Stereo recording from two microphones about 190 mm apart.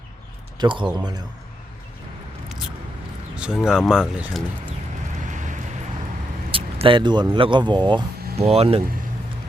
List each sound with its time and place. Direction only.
0.6 s speech: 25° right (ahead or behind)
3.3 s speech: 5° right (ahead or behind)
6.5 s speech: 30° right (ahead or behind)